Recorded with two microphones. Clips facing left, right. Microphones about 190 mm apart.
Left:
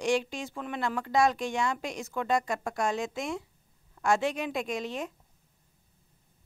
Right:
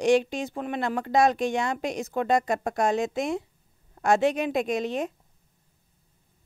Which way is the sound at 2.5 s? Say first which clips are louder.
Right 6 dB; 60° right (ahead or behind).